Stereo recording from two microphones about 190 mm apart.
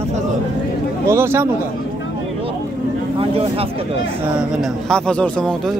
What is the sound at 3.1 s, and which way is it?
Speech, 30° right (ahead or behind).